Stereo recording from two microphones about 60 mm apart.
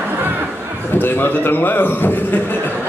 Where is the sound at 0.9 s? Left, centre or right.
Left.